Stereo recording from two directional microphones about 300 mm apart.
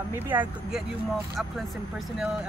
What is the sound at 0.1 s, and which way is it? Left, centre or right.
Speech, centre.